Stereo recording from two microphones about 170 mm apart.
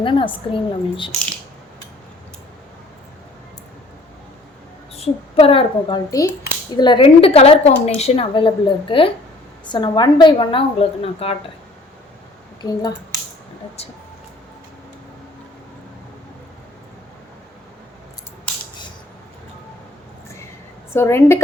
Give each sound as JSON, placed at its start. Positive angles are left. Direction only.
{"t": 0.0, "sound": "a woman's voice", "side_deg": 30}
{"t": 4.9, "sound": "a woman's voice", "side_deg": 35}
{"t": 6.1, "sound": "a woman's voice", "side_deg": 20}
{"t": 13.8, "sound": "a woman's voice", "side_deg": 40}
{"t": 20.9, "sound": "a woman's voice", "side_deg": 15}